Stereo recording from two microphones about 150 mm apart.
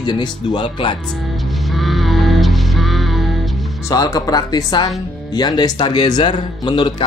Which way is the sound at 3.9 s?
25° left (ahead or behind).